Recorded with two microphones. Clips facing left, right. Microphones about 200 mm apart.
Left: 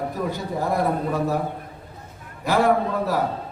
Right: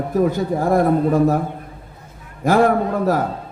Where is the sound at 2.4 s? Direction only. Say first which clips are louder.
Right 6 dB; 50° right (ahead or behind).